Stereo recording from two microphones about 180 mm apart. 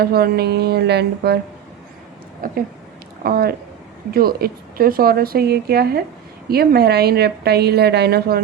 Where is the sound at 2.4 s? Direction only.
55° right (ahead or behind).